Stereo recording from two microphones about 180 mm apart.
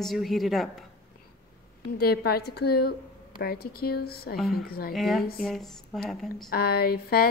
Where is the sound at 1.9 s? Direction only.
60° left (ahead or behind).